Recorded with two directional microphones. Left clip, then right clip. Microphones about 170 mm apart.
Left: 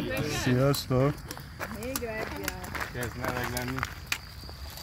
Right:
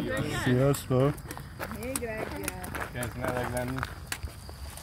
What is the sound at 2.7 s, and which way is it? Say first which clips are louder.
Speech: even; 40° right (ahead or behind).